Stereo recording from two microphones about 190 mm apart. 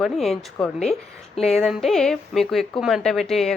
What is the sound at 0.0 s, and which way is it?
A woman's voice, centre (ahead or behind).